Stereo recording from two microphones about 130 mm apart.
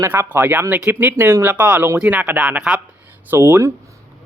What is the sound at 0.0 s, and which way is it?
Speech, 15° right (ahead or behind).